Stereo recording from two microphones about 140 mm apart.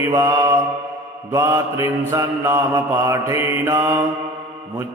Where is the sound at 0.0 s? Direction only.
20° right (ahead or behind).